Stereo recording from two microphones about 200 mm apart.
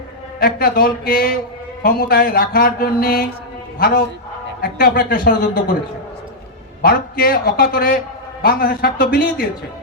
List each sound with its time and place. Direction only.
0.3 s mantra: 50° left (ahead or behind)
6.8 s mantra: 50° left (ahead or behind)